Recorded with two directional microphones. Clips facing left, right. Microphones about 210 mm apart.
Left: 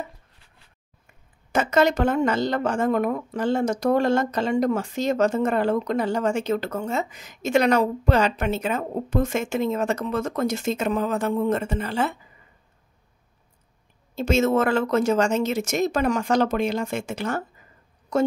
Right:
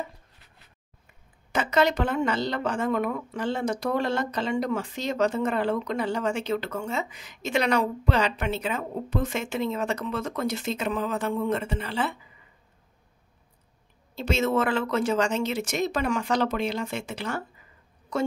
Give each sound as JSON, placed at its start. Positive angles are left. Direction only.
{"t": 1.5, "sound": "speech", "side_deg": 45}
{"t": 14.1, "sound": "speech", "side_deg": 45}